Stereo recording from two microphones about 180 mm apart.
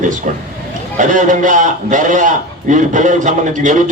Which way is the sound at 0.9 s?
45° right (ahead or behind).